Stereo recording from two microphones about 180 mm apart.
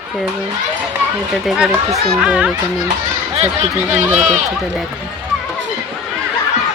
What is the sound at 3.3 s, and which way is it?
Speech, 35° right (ahead or behind).